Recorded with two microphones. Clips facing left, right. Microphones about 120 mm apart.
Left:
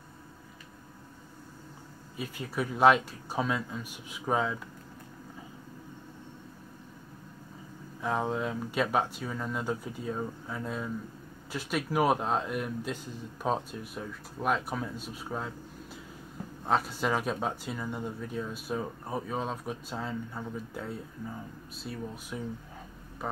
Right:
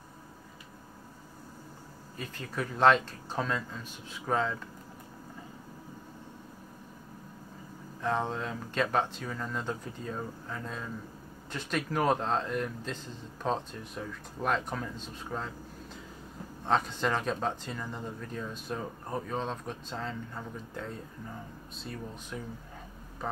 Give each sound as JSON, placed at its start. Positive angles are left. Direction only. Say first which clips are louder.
{"t": 2.1, "sound": "speech", "louder": "left 3 dB", "side_deg": 10}
{"t": 8.0, "sound": "speech", "louder": "left 1 dB", "side_deg": 5}